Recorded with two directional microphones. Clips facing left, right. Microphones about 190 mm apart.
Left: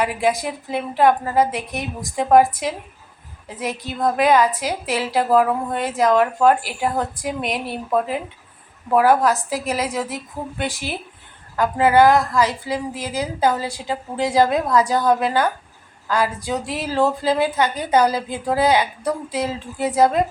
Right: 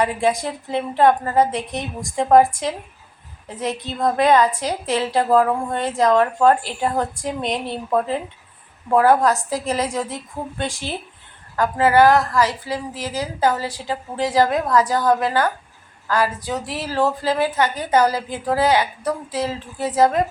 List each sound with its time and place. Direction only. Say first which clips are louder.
0.0 s a woman's voice: right 1 dB; 10° left (ahead or behind)
9.0 s a woman's voice: even; 5° left (ahead or behind)
10.4 s speech: right 1 dB; 20° right (ahead or behind)
11.5 s a woman's voice: left 1 dB; 15° left (ahead or behind)